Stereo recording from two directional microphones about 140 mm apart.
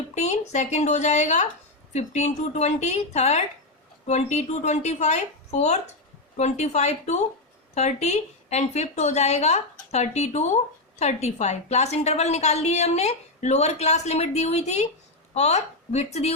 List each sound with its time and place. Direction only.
0.1 s a woman's voice: 55° left (ahead or behind)